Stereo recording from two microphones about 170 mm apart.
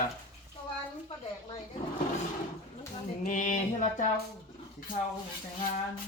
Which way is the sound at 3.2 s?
50° left (ahead or behind).